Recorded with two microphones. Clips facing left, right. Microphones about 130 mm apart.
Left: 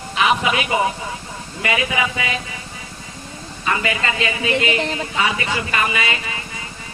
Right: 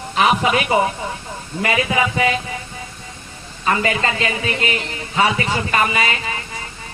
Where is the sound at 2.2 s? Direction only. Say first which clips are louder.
Right 7 dB; 35° right (ahead or behind).